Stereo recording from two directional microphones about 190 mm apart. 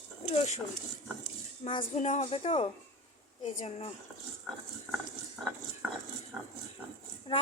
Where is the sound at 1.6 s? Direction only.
30° left (ahead or behind).